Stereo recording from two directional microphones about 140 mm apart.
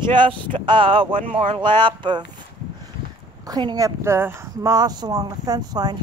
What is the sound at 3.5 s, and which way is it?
Speech, 30° right (ahead or behind).